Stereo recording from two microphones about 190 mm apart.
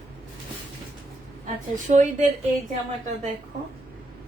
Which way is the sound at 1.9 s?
40° right (ahead or behind).